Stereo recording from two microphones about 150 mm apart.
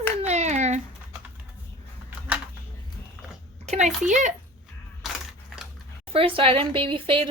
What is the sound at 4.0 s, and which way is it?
Speech, 55° right (ahead or behind).